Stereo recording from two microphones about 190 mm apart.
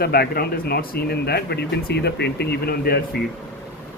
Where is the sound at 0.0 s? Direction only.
55° left (ahead or behind).